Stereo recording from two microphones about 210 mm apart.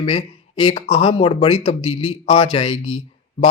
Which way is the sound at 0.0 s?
25° left (ahead or behind).